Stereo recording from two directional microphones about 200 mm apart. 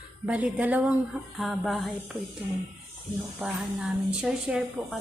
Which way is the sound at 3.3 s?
Centre (ahead or behind).